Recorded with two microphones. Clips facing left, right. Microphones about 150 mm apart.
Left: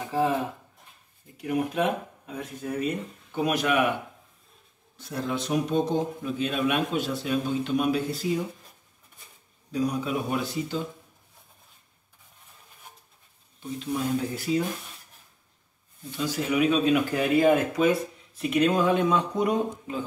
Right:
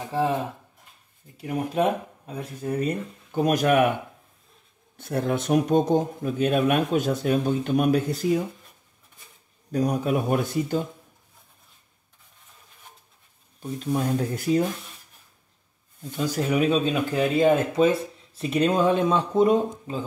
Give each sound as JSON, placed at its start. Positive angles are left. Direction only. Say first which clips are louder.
{"t": 1.4, "sound": "speech", "louder": "right 2 dB", "side_deg": -35}
{"t": 4.9, "sound": "speech", "louder": "right 5 dB", "side_deg": -55}
{"t": 9.7, "sound": "speech", "louder": "right 4 dB", "side_deg": -50}
{"t": 13.6, "sound": "speech", "louder": "right 3 dB", "side_deg": -45}
{"t": 16.3, "sound": "speech", "louder": "right 1 dB", "side_deg": -40}
{"t": 16.8, "sound": "speech", "louder": "even", "side_deg": -25}